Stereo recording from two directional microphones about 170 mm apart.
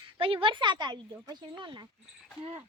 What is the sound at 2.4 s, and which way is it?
Cricket, 35° right (ahead or behind).